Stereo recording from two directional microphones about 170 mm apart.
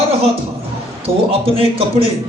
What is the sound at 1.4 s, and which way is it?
Speech, 35° right (ahead or behind).